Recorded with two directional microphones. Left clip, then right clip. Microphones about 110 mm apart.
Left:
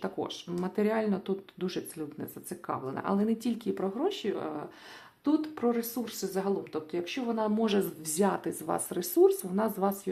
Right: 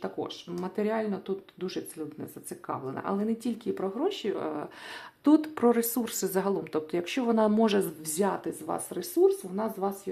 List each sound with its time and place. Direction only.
0.0 s speech: centre (ahead or behind); by 4.7 s 20° right (ahead or behind)
5.2 s speech: 65° right (ahead or behind); by 7.9 s 35° right (ahead or behind)
8.2 s speech: 5° right (ahead or behind)